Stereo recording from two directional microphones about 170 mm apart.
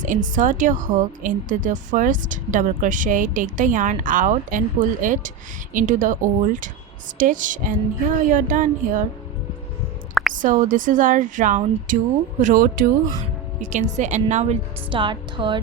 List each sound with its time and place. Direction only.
0.0 s a woman's voice: 50° right (ahead or behind)
7.2 s a woman's voice: 50° right (ahead or behind)
10.4 s a woman's voice: 50° right (ahead or behind)
13.6 s a woman's voice: 45° right (ahead or behind)
14.8 s speech: 30° right (ahead or behind)